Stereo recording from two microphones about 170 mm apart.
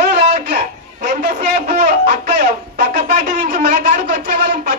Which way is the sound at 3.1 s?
40° right (ahead or behind).